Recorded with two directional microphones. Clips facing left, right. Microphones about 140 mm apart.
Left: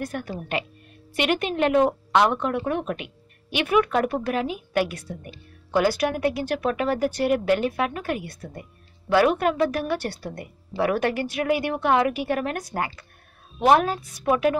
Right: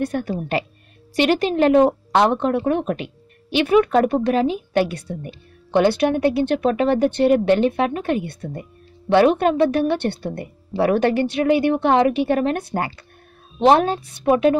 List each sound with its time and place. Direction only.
0.0 s a woman's voice: 30° right (ahead or behind)